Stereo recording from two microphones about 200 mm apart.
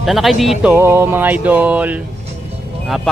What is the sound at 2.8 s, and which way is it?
Speech, centre (ahead or behind).